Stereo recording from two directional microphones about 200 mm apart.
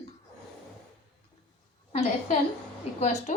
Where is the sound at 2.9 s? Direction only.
35° left (ahead or behind).